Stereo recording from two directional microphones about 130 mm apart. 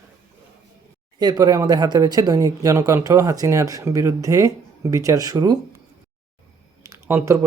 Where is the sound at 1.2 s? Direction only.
30° right (ahead or behind).